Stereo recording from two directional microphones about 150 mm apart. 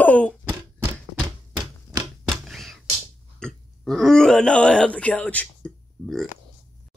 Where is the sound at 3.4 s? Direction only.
5° left (ahead or behind).